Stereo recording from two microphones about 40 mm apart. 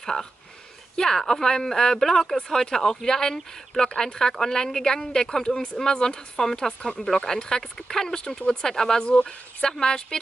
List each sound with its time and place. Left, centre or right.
0.0 s speech: centre